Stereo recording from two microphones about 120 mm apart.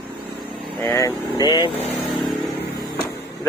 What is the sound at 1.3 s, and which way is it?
Speech, 35° left (ahead or behind).